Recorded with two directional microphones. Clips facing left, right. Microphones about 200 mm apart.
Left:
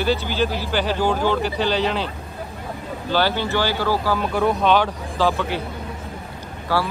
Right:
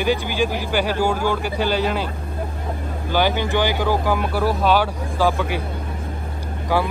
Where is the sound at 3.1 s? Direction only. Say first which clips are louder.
Right 1 dB; 15° right (ahead or behind).